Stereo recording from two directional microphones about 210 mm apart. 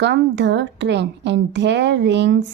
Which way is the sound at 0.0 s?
55° right (ahead or behind).